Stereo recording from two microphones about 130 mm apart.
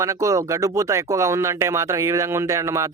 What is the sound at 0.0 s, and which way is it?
Speech, 25° right (ahead or behind).